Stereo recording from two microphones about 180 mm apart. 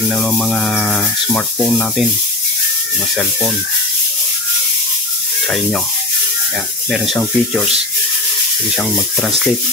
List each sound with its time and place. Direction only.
0.1 s speech: 5° left (ahead or behind)
6.9 s speech: centre (ahead or behind)